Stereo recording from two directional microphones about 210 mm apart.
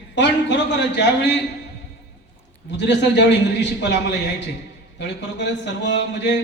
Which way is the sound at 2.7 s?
55° left (ahead or behind).